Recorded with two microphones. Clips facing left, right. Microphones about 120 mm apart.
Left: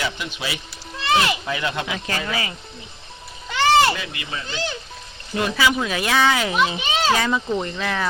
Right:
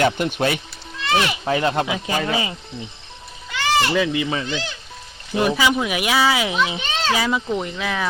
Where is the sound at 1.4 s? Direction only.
40° right (ahead or behind).